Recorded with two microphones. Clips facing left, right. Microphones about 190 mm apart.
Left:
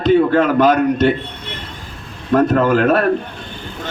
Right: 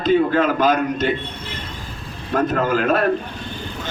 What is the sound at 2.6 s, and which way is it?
Speech, 60° left (ahead or behind).